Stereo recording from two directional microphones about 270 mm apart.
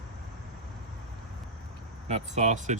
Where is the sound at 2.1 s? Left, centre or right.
Right.